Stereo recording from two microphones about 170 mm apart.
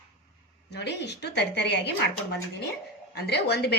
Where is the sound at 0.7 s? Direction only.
85° left.